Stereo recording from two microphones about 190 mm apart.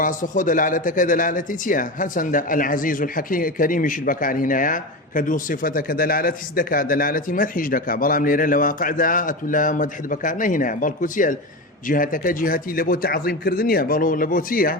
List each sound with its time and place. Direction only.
0.0 s a man's voice: 45° left (ahead or behind)